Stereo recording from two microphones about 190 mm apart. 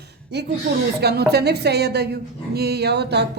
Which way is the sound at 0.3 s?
60° right (ahead or behind).